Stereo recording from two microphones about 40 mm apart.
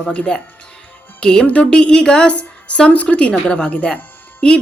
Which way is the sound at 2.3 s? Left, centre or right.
Left.